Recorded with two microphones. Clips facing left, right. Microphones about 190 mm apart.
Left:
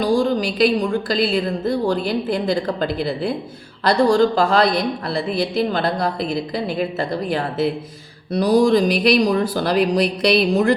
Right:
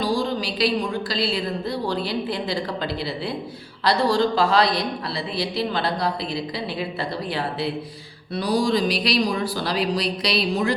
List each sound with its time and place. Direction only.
0.0 s speech: 50° left (ahead or behind)